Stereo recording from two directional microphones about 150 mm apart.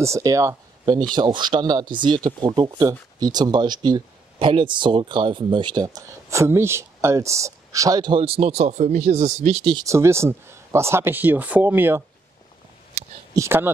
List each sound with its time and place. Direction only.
0.0 s speech: 20° right (ahead or behind); by 9.8 s 40° right (ahead or behind)
9.8 s speech: 20° right (ahead or behind)
13.3 s speech: 15° right (ahead or behind)